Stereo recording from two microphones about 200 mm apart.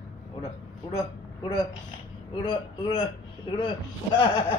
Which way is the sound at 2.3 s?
25° left (ahead or behind).